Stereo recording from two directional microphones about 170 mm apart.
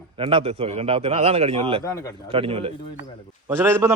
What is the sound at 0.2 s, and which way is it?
A man's voice, 30° right (ahead or behind).